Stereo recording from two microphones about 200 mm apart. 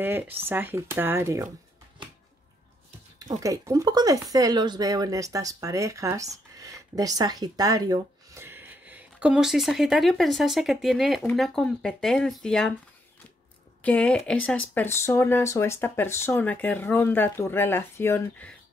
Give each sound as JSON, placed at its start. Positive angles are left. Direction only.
{"t": 0.0, "sound": "speech", "side_deg": -10}
{"t": 3.2, "sound": "speech", "side_deg": -20}
{"t": 13.8, "sound": "speech", "side_deg": 5}